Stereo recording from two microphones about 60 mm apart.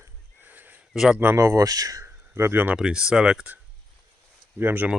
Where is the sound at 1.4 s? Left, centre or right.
Right.